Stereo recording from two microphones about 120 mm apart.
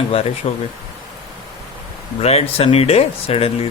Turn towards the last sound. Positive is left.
turn(degrees=55)  # may be behind; listen again after turning